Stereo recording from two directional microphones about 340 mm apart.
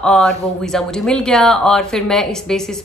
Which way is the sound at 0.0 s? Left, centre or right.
Centre.